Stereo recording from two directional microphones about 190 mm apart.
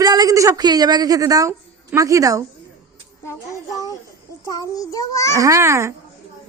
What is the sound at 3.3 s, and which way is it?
Speech, 20° left (ahead or behind).